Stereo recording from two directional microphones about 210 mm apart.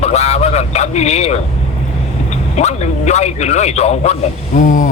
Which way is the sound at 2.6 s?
30° left (ahead or behind).